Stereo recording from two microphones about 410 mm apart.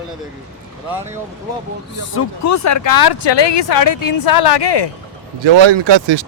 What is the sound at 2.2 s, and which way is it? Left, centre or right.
Speech, left.